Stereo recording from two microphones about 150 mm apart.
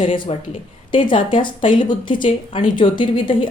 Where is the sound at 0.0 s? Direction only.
35° left (ahead or behind).